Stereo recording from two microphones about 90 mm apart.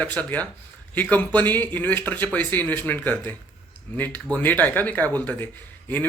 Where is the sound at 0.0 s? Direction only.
15° left (ahead or behind).